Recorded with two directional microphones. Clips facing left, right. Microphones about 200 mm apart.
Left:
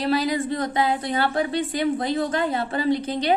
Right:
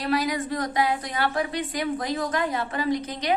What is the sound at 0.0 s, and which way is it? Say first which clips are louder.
A woman's voice: left 3 dB; 30° left (ahead or behind).